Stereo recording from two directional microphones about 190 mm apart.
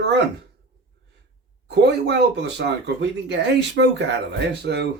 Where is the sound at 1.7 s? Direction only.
60° right (ahead or behind).